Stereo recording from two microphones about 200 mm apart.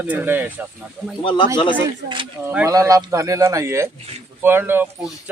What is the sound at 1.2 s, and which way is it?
Speech, 25° left (ahead or behind).